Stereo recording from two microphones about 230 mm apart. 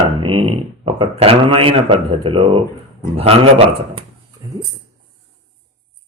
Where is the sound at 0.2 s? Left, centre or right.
Right.